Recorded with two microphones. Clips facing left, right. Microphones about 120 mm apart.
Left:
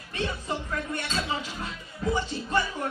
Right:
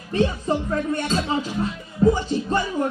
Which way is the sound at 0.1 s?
35° right (ahead or behind).